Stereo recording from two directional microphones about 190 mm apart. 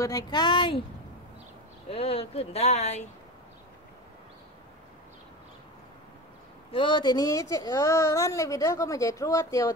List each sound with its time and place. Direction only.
0.0 s speech: 20° left (ahead or behind)
1.9 s speech: 30° left (ahead or behind)
6.7 s speech: 25° left (ahead or behind)